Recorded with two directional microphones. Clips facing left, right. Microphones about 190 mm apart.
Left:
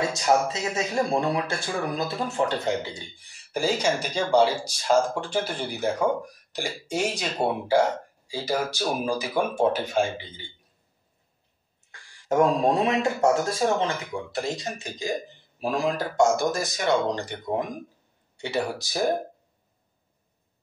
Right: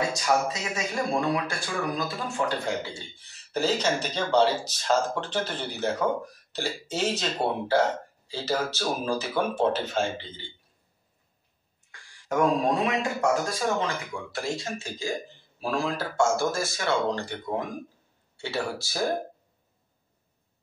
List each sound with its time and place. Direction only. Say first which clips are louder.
0.1 s a man's voice: left 3 dB; 25° left (ahead or behind)
12.3 s a man's voice: left 3 dB; 25° left (ahead or behind)